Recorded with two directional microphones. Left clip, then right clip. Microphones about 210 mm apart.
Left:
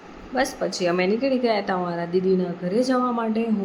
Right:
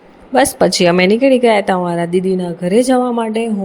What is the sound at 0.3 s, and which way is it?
A child's voice, 45° right (ahead or behind).